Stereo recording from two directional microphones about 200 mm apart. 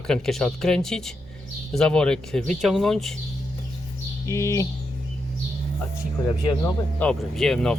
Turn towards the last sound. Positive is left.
turn(degrees=5)  # may be behind; listen again after turning